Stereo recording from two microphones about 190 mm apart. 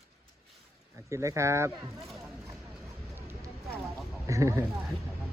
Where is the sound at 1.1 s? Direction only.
15° right (ahead or behind).